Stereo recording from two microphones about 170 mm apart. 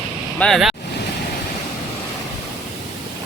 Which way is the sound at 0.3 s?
5° left (ahead or behind).